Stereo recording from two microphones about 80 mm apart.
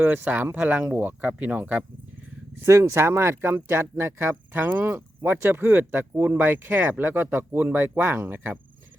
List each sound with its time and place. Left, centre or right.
0.0 s speech: right
2.6 s speech: right